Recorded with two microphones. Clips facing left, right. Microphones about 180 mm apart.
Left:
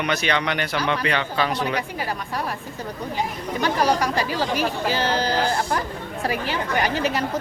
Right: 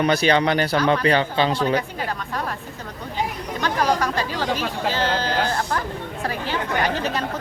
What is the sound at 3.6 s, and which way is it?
A woman's voice, 10° left (ahead or behind).